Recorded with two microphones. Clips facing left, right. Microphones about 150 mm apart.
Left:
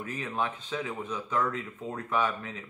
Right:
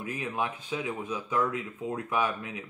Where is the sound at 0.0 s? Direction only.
10° right (ahead or behind).